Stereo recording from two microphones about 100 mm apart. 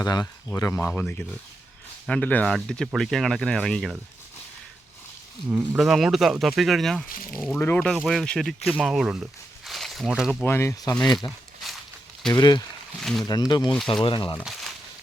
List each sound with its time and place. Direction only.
0.0 s speech: 40° left (ahead or behind)
0.7 s speech: 20° left (ahead or behind); by 3.9 s 5° left (ahead or behind)
5.5 s speech: 15° right (ahead or behind)
7.5 s speech: 20° left (ahead or behind)
7.9 s speech: centre (ahead or behind)
8.8 s speech: 5° right (ahead or behind)
10.4 s speech: 25° left (ahead or behind)
11.3 s walk: centre (ahead or behind)
12.3 s speech: 45° left (ahead or behind)
13.0 s speech: 5° left (ahead or behind)
13.2 s speech: 40° left (ahead or behind)
14.4 s speech: centre (ahead or behind)